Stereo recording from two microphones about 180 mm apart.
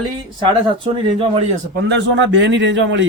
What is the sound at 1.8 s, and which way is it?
A man's voice, 80° right.